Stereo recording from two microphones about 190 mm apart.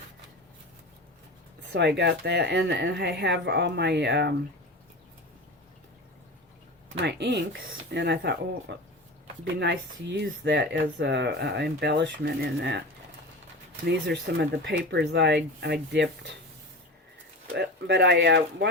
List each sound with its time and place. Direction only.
1.7 s speech: 65° right (ahead or behind)
7.0 s speech: 65° right (ahead or behind)
13.8 s speech: 60° right (ahead or behind)
17.5 s speech: 65° right (ahead or behind)